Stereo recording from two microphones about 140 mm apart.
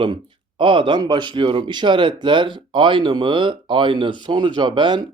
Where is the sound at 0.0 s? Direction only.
35° right (ahead or behind).